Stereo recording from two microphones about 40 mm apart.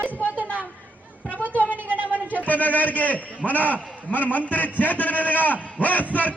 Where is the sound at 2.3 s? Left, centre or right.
Left.